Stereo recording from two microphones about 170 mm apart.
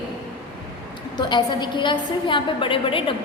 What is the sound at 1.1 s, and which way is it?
A woman's voice, 25° left (ahead or behind).